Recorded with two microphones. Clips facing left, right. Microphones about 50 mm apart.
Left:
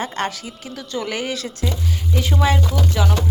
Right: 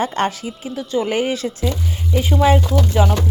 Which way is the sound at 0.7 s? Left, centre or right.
Centre.